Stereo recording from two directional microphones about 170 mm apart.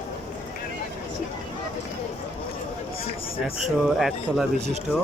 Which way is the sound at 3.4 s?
Centre (ahead or behind).